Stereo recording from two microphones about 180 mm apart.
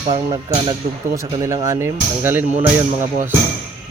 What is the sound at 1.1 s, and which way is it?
Speech, 20° right (ahead or behind).